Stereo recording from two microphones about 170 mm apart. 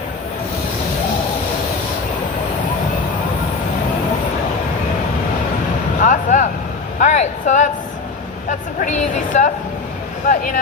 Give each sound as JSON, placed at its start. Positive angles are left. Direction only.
{"t": 6.0, "sound": "vehicle", "side_deg": 50}
{"t": 8.4, "sound": "a sound", "side_deg": 50}
{"t": 10.2, "sound": "speech", "side_deg": 50}